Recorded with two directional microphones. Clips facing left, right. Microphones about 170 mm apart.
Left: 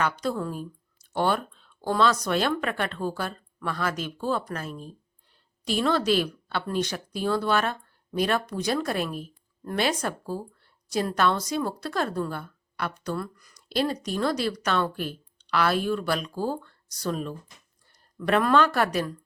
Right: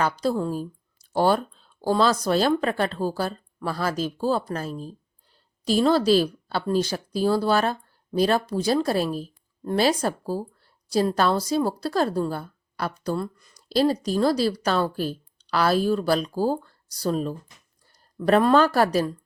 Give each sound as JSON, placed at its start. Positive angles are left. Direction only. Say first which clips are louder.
{"t": 0.0, "sound": "a woman's voice", "louder": "right 4 dB", "side_deg": -30}